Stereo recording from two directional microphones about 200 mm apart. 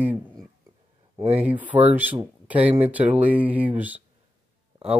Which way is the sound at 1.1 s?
30° right (ahead or behind).